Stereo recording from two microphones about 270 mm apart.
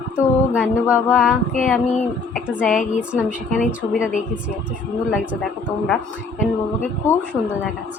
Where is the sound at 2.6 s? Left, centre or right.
Left.